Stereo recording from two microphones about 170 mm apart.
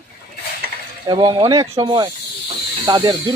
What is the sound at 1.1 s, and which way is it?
Speech, 30° right (ahead or behind).